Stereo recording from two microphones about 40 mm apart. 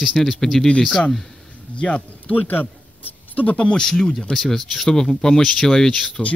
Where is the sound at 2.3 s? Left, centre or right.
Left.